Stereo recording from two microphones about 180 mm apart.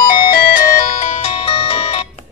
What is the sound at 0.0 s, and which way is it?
Music, 55° left (ahead or behind).